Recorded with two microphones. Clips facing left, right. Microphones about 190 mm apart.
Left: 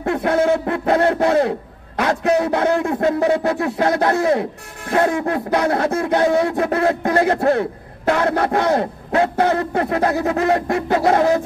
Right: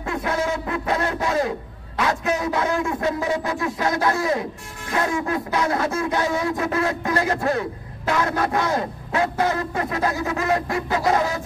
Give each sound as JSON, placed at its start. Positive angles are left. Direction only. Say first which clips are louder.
{"t": 0.0, "sound": "speech", "louder": "left 7 dB", "side_deg": 60}